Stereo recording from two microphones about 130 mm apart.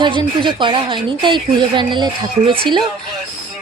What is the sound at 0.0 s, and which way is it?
Speech, 35° right (ahead or behind).